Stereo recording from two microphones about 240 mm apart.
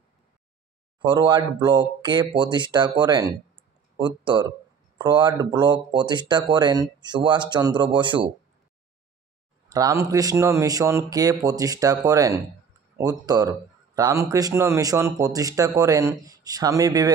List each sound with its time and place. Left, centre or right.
1.0 s speech: centre
9.7 s speech: centre